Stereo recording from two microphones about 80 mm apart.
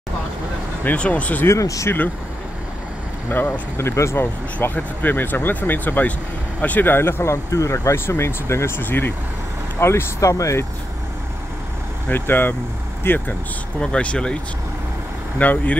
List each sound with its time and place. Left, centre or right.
0.8 s speech: centre
1.5 s speech: left
3.3 s speech: left
4.6 s speech: left
12.1 s speech: left
13.7 s speech: centre